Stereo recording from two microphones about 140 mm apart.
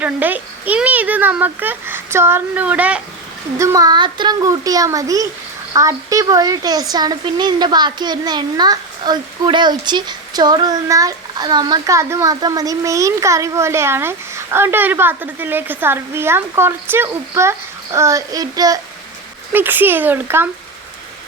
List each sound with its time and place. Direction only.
0.0 s speech: 10° right (ahead or behind)
3.6 s a child's voice: 25° right (ahead or behind)
19.5 s speech: 15° right (ahead or behind)